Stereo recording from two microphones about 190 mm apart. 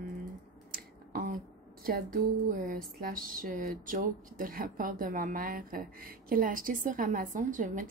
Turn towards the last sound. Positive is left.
turn(degrees=-45)  # may be behind; listen again after turning